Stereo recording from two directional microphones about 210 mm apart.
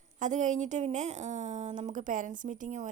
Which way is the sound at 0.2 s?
35° right (ahead or behind).